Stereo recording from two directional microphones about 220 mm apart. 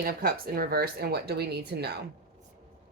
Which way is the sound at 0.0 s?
40° right (ahead or behind).